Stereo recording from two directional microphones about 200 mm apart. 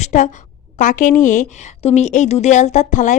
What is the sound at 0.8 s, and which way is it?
Speech, 40° left (ahead or behind).